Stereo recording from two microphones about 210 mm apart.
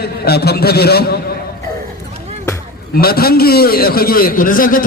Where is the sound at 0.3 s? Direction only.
50° left (ahead or behind).